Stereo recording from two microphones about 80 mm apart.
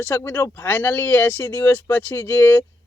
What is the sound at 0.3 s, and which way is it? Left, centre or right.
Speech, left.